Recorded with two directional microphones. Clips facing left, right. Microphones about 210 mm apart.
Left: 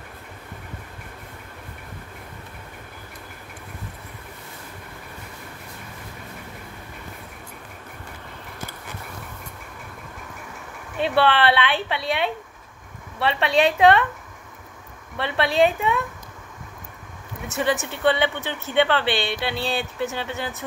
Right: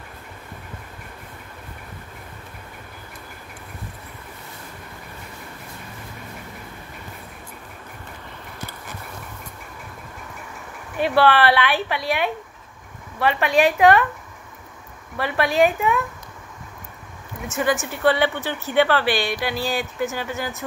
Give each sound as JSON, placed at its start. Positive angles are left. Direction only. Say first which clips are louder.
{"t": 11.0, "sound": "speech", "louder": "right 2 dB", "side_deg": 25}
{"t": 15.1, "sound": "speech", "louder": "right 1 dB", "side_deg": 25}
{"t": 17.5, "sound": "a woman's voice", "louder": "right 1 dB", "side_deg": 35}
{"t": 18.0, "sound": "speech", "louder": "right 2 dB", "side_deg": 20}